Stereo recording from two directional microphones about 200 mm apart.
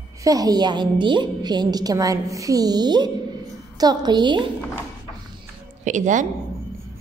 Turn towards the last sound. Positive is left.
turn(degrees=-40)  # may be behind; listen again after turning